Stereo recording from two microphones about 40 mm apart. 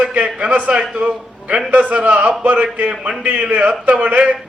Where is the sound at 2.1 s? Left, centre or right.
Right.